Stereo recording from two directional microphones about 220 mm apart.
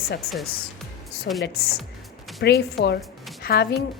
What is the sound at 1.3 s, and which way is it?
Music, 50° left (ahead or behind).